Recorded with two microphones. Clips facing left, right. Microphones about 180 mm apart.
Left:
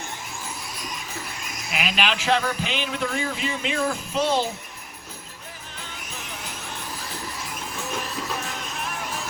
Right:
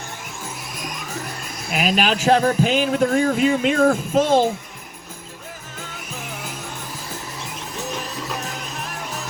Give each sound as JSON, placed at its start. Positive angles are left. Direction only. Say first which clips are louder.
{"t": 1.7, "sound": "music", "louder": "right 6 dB", "side_deg": -40}